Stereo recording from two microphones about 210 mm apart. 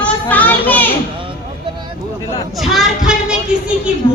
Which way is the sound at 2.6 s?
Centre (ahead or behind).